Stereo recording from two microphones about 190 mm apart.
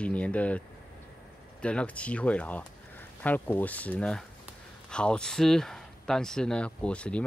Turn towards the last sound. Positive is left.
turn(degrees=5)  # may be behind; listen again after turning